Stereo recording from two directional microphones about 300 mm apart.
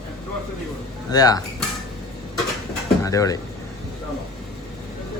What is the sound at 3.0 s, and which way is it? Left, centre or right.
Speech, centre.